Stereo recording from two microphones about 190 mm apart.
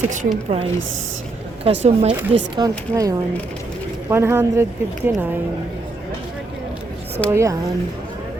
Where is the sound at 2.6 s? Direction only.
20° right (ahead or behind).